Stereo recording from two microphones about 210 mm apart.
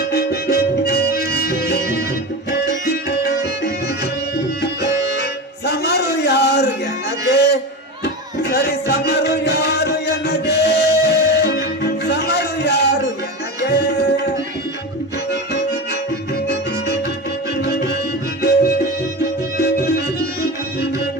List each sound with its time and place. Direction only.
0.1 s music: 50° left (ahead or behind)
7.3 s a sound: 50° left (ahead or behind)
8.4 s music: 50° left (ahead or behind)
13.7 s tabla: 50° left (ahead or behind)
17.6 s music: 50° left (ahead or behind)